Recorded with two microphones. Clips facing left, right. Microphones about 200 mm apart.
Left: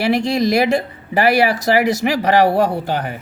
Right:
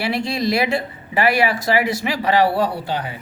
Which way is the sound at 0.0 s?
45° left (ahead or behind).